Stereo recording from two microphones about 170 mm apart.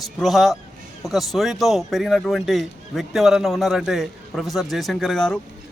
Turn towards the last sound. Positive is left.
turn(degrees=5)  # may be behind; listen again after turning